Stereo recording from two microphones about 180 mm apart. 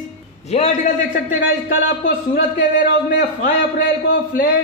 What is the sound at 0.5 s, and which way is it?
Speech, 40° left (ahead or behind).